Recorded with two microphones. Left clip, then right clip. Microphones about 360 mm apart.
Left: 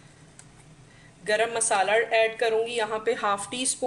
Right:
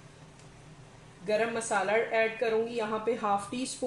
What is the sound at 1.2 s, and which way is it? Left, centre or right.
A woman's voice, left.